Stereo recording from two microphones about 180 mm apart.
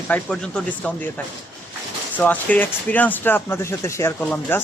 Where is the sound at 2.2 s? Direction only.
10° left (ahead or behind).